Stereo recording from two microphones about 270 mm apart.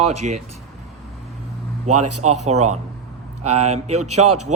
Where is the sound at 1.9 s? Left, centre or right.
Right.